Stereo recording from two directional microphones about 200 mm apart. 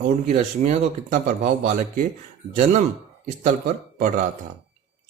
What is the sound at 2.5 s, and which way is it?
Speech, 35° right (ahead or behind).